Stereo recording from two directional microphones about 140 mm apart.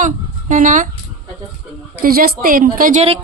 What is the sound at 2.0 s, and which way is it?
A woman's voice, 90° right.